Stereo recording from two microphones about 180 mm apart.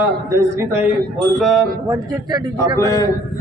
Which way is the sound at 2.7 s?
20° left (ahead or behind).